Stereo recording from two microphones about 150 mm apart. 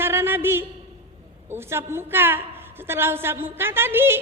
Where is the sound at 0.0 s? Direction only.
15° right (ahead or behind).